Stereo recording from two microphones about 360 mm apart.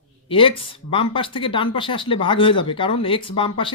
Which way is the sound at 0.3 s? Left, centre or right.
Centre.